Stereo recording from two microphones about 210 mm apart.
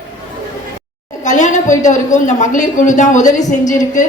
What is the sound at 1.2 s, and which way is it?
A woman's voice, 35° left (ahead or behind).